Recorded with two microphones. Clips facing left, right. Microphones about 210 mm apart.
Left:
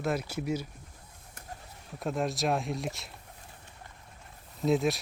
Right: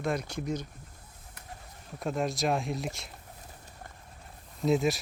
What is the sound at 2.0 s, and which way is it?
Speech, centre (ahead or behind).